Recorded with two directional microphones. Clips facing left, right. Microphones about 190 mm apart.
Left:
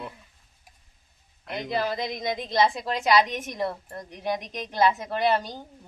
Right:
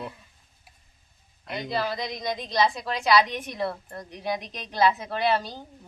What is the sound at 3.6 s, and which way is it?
Speech, 20° left (ahead or behind).